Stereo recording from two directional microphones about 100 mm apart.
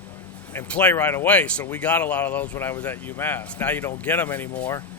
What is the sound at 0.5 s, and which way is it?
Speech, 20° left (ahead or behind).